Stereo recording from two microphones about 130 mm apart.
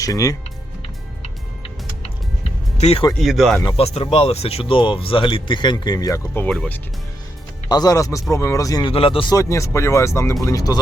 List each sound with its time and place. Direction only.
0.0 s speech: 25° left (ahead or behind)
2.7 s speech: 55° left (ahead or behind)
3.2 s speech: centre (ahead or behind)
3.8 s speech: 50° left (ahead or behind); by 6.2 s 30° left (ahead or behind)
6.3 s speech: 10° left (ahead or behind)
7.7 s speech: 30° left (ahead or behind)
8.9 s speech: 45° left (ahead or behind)
9.3 s speech: 25° left (ahead or behind)